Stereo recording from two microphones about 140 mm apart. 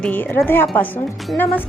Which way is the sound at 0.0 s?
10° left (ahead or behind).